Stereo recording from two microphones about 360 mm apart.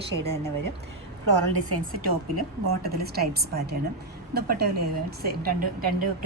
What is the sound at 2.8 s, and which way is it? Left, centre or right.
A woman's voice, right.